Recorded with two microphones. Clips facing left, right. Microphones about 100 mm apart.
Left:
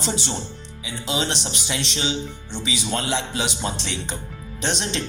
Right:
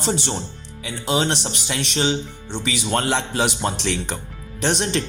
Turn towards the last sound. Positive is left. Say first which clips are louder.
# right 4 dB
turn(degrees=-60)  # may be behind; listen again after turning